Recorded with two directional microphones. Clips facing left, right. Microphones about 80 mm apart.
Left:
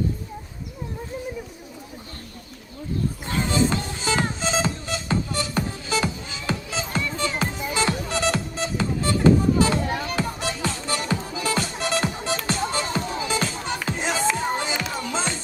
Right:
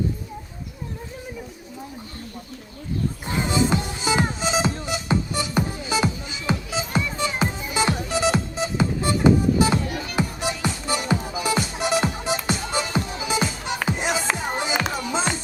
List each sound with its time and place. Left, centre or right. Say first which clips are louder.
3.2 s music: right 1 dB; centre
9.7 s music: left 1 dB; left
10.2 s music: right 1 dB; centre